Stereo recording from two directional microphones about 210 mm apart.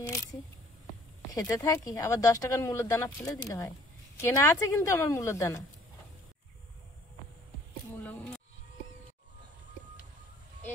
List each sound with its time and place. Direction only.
0.0 s single-lens reflex camera: 15° left (ahead or behind)
1.3 s speech: 15° left (ahead or behind)
7.9 s a sound: 10° left (ahead or behind)